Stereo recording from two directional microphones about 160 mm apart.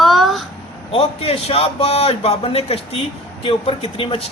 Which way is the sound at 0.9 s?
40° left (ahead or behind).